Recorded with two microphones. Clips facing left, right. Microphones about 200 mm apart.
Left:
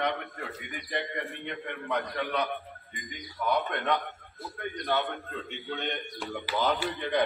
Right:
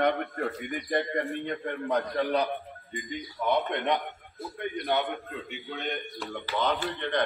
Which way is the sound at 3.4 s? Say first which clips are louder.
Right 2 dB; 20° right (ahead or behind).